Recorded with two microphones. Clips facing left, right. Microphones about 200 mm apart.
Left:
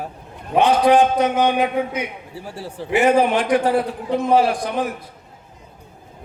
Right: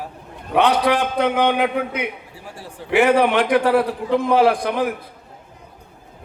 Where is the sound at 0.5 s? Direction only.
65° right (ahead or behind).